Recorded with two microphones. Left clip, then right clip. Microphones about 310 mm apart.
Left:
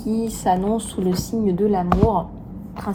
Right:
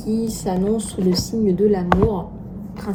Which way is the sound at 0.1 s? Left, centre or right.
Centre.